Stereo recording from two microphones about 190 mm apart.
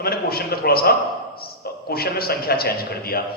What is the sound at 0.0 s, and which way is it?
A man's voice, 55° left (ahead or behind).